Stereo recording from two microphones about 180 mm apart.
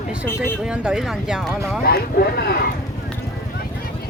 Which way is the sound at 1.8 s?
60° left (ahead or behind).